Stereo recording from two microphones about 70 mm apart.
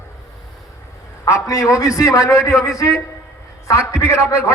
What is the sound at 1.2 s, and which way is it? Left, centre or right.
A man's voice, left.